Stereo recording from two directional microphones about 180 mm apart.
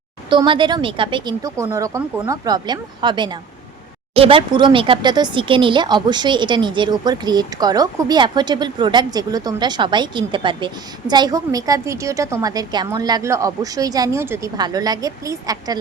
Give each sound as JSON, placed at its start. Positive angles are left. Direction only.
{"t": 0.3, "sound": "speech", "side_deg": -25}